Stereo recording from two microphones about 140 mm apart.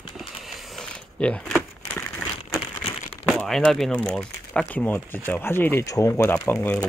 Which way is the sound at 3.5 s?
Centre (ahead or behind).